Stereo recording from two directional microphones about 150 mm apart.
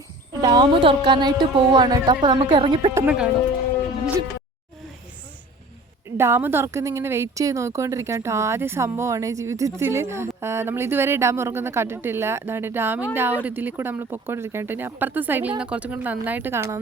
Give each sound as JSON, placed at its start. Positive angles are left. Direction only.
{"t": 0.4, "sound": "speech", "side_deg": -30}
{"t": 2.9, "sound": "a woman's voice", "side_deg": -10}
{"t": 6.1, "sound": "a woman's voice", "side_deg": -15}